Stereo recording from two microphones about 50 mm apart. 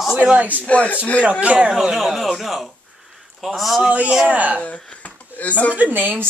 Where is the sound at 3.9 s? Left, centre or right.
Right.